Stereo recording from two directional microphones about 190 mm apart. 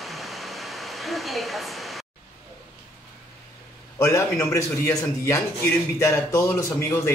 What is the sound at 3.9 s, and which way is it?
Speech, 15° left (ahead or behind).